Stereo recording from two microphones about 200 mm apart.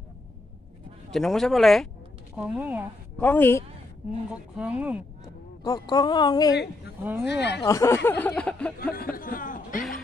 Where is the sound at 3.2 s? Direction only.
10° left (ahead or behind).